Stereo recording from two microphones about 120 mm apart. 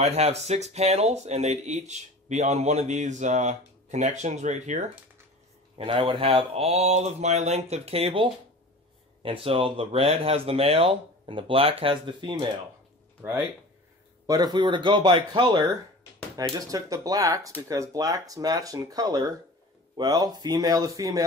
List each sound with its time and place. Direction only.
0.0 s speech: 60° right (ahead or behind); by 4.8 s 80° right
5.8 s speech: 45° right (ahead or behind)
14.2 s speech: 35° right (ahead or behind)